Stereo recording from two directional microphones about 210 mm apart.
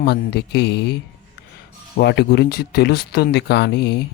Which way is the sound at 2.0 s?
50° left (ahead or behind).